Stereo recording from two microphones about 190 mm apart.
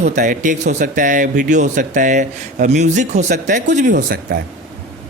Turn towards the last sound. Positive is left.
turn(degrees=-50)  # may be behind; listen again after turning